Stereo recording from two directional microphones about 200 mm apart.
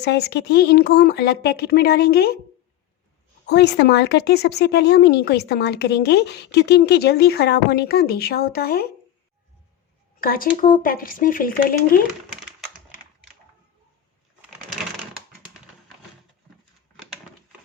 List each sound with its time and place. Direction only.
0.0 s speech: 55° left (ahead or behind)
3.4 s speech: 60° left (ahead or behind)
10.2 s speech: 45° left (ahead or behind)